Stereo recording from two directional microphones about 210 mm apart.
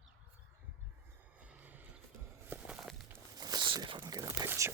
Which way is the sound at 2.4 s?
5° right (ahead or behind).